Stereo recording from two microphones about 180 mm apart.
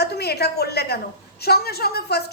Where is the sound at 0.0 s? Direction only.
65° left (ahead or behind).